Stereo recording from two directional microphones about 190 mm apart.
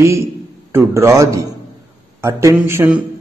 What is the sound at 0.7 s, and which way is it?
A man's voice, 15° right (ahead or behind).